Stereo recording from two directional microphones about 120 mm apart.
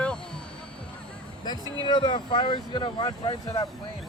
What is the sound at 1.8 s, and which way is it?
Speech, 40° left (ahead or behind).